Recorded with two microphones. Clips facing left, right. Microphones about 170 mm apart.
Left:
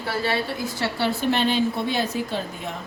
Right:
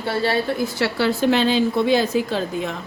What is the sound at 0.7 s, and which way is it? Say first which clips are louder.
A woman's voice: right 3 dB; 90° right.